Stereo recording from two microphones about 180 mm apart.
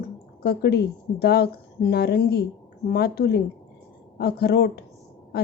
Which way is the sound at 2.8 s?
60° left (ahead or behind).